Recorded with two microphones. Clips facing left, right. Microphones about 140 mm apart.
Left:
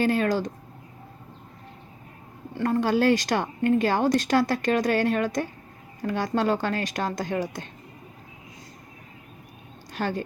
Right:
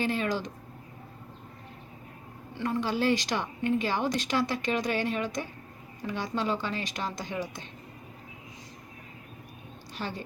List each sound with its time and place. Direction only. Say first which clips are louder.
0.0 s speech: left 6 dB; 45° left (ahead or behind)
2.6 s speech: left 6 dB; 45° left (ahead or behind)
9.9 s a woman's voice: left 8 dB; 50° left (ahead or behind)